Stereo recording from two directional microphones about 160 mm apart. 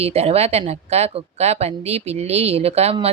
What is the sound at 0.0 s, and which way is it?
Speech, 40° right (ahead or behind).